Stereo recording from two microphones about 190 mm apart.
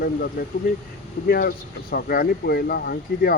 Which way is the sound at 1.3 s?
50° left (ahead or behind).